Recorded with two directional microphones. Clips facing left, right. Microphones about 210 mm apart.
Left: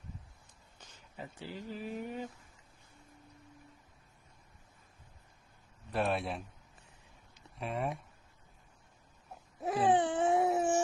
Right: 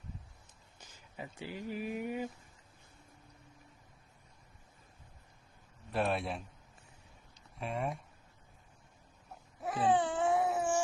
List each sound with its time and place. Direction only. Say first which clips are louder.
0.8 s speech: right 1 dB; 10° right (ahead or behind)
5.9 s speech: even; centre (ahead or behind)
9.9 s baby cry: left 1 dB; 20° left (ahead or behind)